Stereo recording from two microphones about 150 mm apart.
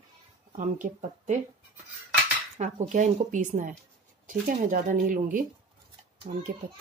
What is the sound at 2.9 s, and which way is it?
Speech, 55° right (ahead or behind).